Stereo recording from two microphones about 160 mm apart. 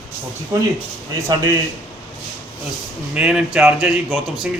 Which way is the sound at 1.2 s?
20° right (ahead or behind).